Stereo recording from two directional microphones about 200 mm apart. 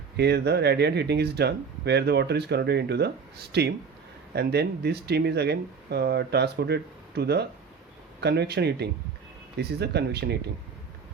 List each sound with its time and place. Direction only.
0.2 s speech: 55° right (ahead or behind)